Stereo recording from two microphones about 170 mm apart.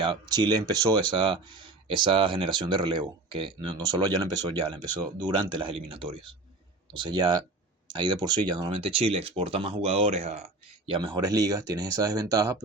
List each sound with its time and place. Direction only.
0.0 s speech: 25° right (ahead or behind)
10.8 s speech: 30° right (ahead or behind)